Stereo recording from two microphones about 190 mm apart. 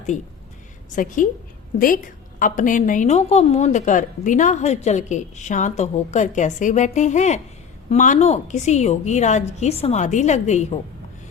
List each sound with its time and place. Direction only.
0.9 s a woman's voice: 45° left (ahead or behind)